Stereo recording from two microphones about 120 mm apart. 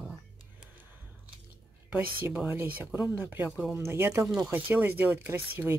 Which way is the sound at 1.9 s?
15° right (ahead or behind).